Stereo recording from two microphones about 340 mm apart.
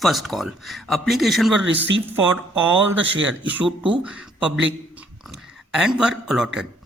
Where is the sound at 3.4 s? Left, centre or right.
Centre.